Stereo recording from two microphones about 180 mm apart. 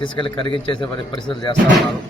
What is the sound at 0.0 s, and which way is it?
A man's voice, 25° left (ahead or behind).